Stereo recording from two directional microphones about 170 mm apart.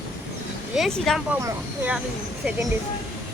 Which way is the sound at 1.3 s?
15° right (ahead or behind).